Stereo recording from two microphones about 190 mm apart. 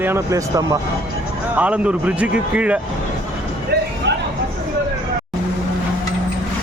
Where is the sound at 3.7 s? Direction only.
55° right (ahead or behind).